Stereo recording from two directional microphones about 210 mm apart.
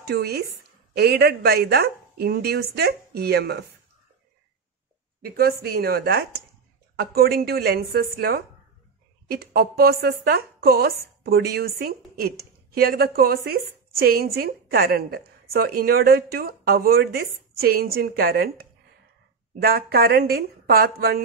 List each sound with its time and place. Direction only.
0.0 s a woman's voice: 50° right (ahead or behind)
5.2 s a woman's voice: 50° right (ahead or behind)